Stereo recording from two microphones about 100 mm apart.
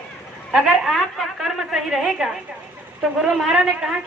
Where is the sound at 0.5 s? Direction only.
Centre (ahead or behind).